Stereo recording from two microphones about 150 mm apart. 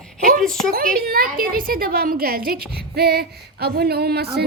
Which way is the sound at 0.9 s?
85° right.